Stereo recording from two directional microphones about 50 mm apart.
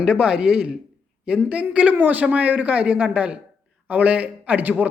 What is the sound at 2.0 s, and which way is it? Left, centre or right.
A man's voice, right.